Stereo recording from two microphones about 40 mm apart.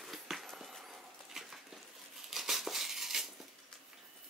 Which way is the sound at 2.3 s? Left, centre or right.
Centre.